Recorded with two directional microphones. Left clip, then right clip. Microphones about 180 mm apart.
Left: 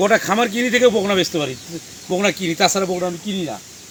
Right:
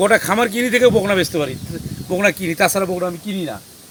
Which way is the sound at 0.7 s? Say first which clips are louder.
Right 2 dB; 10° right (ahead or behind).